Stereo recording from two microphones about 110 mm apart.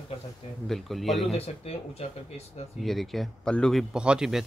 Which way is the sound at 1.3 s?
70° left (ahead or behind).